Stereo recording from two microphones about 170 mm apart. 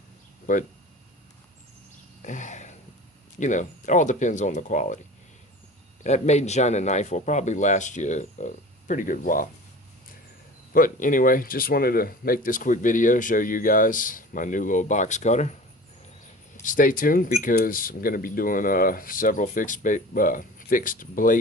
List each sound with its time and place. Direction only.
0.5 s speech: 55° left (ahead or behind)
2.2 s a sound: 45° left (ahead or behind)
3.4 s speech: 45° left (ahead or behind)
6.0 s speech: 40° left (ahead or behind)
10.7 s speech: 55° left (ahead or behind)
16.6 s speech: 55° left (ahead or behind)